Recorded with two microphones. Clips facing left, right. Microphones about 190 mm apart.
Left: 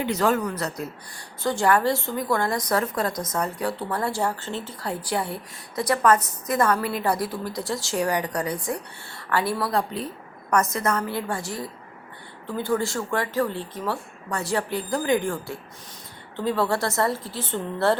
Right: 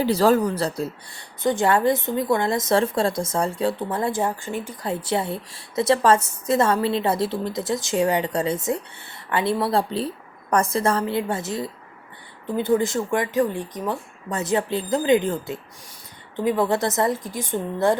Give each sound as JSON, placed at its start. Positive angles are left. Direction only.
{"t": 0.0, "sound": "speech", "side_deg": -35}
{"t": 1.4, "sound": "a woman's voice", "side_deg": -20}